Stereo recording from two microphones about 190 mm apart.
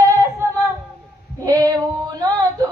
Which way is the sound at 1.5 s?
20° right (ahead or behind).